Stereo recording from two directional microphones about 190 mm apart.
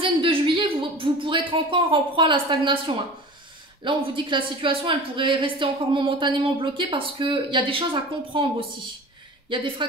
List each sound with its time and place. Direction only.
0.0 s speech: 25° right (ahead or behind)
3.8 s speech: 25° right (ahead or behind)